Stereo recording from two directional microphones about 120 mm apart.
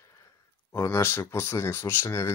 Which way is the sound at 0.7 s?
20° left (ahead or behind).